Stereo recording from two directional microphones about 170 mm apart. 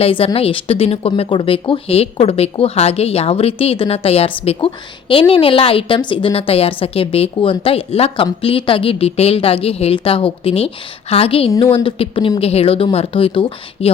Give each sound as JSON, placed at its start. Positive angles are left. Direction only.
{"t": 0.0, "sound": "speech", "side_deg": 30}